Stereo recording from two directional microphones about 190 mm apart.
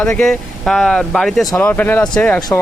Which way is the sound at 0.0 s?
5° left (ahead or behind).